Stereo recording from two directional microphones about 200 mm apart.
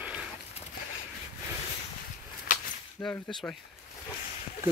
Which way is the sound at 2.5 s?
45° left (ahead or behind).